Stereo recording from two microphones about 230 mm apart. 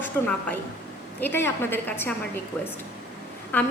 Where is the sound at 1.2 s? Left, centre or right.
Centre.